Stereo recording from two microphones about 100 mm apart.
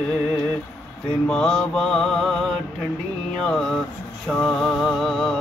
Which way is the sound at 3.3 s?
5° left (ahead or behind).